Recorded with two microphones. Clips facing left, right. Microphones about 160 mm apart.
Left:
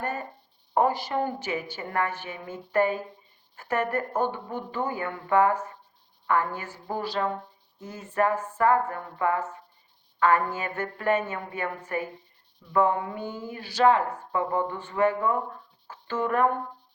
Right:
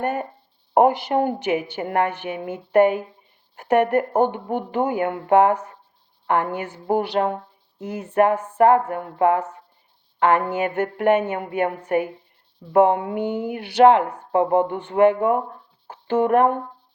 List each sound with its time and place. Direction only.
0.0 s speech: 65° right (ahead or behind)